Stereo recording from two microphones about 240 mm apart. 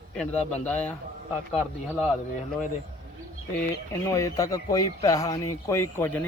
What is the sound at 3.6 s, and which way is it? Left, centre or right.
Speech, centre.